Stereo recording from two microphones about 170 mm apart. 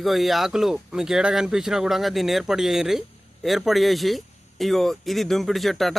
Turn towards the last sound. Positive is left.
turn(degrees=0)  # may be behind; listen again after turning